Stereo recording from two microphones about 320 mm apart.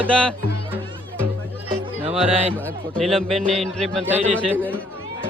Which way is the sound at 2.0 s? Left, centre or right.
Centre.